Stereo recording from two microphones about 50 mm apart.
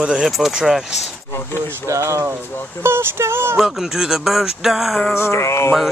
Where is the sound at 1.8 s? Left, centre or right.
Right.